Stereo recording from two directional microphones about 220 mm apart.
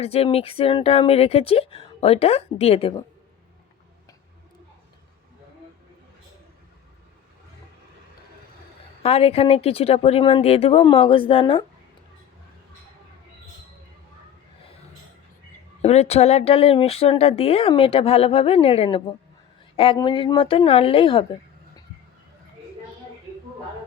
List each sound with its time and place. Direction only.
0.0 s speech: 25° left (ahead or behind)
9.0 s speech: 25° left (ahead or behind)
15.8 s speech: 30° left (ahead or behind)